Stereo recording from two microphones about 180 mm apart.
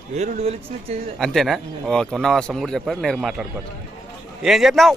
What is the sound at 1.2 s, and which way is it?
Speech, centre (ahead or behind).